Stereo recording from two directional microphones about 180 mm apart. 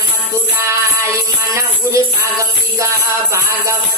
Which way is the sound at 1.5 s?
15° right (ahead or behind).